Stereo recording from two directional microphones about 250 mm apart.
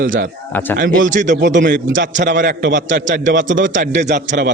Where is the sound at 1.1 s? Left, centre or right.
Right.